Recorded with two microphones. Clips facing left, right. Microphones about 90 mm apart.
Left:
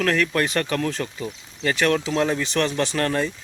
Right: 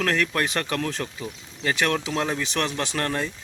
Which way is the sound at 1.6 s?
15° right (ahead or behind).